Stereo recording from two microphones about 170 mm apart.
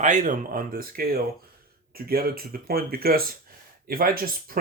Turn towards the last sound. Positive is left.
turn(degrees=-60)  # may be behind; listen again after turning